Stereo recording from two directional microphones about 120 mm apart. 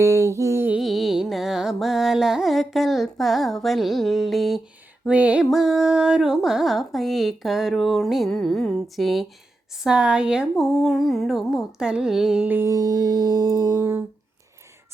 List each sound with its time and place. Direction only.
0.0 s a sound: 25° right (ahead or behind)
0.7 s carnatic music: centre (ahead or behind)
5.0 s carnatic music: 10° right (ahead or behind)
12.7 s music: 30° right (ahead or behind)